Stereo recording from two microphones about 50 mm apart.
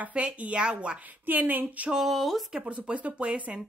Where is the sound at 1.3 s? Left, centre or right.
Right.